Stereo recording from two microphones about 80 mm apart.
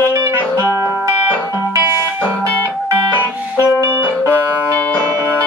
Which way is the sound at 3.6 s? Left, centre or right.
Right.